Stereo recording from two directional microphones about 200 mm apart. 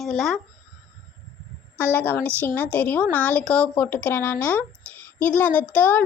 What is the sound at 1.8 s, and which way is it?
A woman's voice, 10° left (ahead or behind).